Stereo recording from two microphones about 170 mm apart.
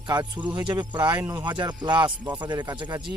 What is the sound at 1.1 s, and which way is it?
Speech, 10° right (ahead or behind).